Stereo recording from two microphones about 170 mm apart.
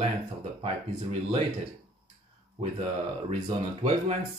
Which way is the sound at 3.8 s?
40° right (ahead or behind).